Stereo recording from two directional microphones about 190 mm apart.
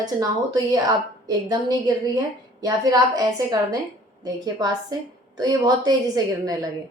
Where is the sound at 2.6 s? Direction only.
20° right (ahead or behind).